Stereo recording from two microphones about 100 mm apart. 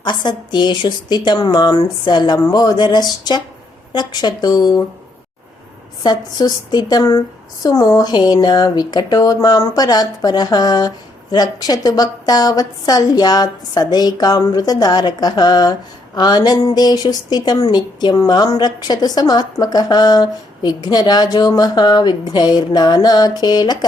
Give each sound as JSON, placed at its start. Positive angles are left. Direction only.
{"t": 0.0, "sound": "speech", "side_deg": 50}
{"t": 6.0, "sound": "speech", "side_deg": 45}